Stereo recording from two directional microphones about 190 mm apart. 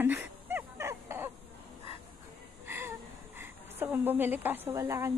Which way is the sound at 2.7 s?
15° right (ahead or behind).